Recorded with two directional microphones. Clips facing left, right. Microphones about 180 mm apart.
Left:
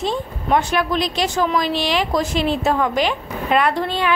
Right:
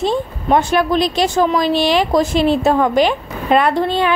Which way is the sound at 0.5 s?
30° right (ahead or behind).